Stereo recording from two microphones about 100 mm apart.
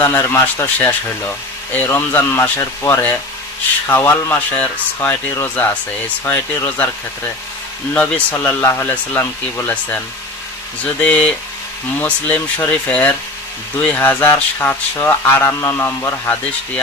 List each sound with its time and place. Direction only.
0.0 s speech: 25° left (ahead or behind)
7.9 s speech: 15° left (ahead or behind)
11.0 s speech: 15° left (ahead or behind)